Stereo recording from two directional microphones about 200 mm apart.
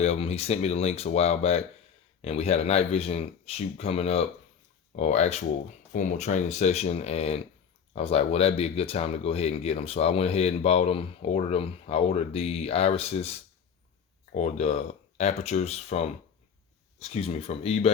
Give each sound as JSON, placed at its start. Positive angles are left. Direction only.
{"t": 0.0, "sound": "speech", "side_deg": 30}
{"t": 14.3, "sound": "speech", "side_deg": 35}